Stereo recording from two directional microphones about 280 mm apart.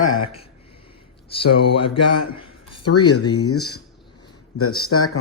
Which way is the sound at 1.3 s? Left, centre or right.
Centre.